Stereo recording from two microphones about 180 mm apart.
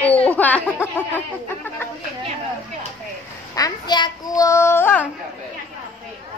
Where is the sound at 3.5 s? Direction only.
20° left (ahead or behind).